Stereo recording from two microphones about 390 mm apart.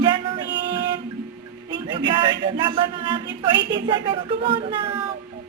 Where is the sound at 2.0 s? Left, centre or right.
Centre.